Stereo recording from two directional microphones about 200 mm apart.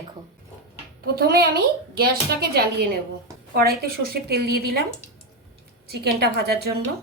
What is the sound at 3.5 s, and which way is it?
A woman's voice, 50° right (ahead or behind).